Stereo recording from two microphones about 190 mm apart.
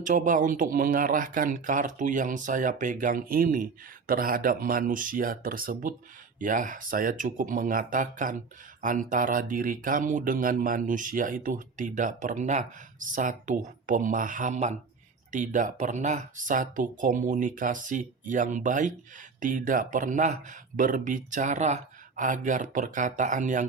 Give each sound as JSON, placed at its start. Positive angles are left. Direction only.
{"t": 0.0, "sound": "speech", "side_deg": -40}